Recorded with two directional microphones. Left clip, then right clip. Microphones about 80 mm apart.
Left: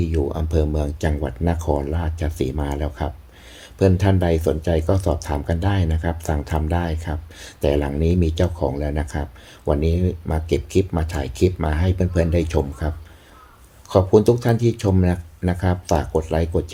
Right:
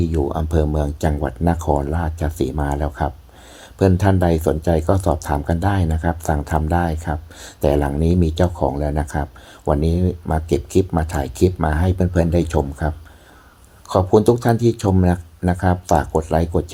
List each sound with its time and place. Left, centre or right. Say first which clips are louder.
0.0 s speech: right 2 dB; right
8.7 s speech: right 3 dB; centre